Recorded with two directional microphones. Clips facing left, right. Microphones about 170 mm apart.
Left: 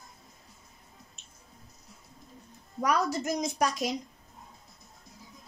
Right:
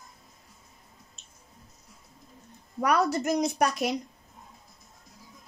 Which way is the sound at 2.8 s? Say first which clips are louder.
Right 3 dB; 60° right (ahead or behind).